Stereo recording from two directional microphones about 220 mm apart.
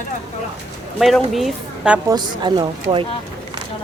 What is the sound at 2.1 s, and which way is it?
Speech, 20° right (ahead or behind).